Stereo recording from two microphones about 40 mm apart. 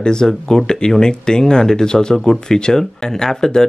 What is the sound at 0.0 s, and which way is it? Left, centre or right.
Speech, centre.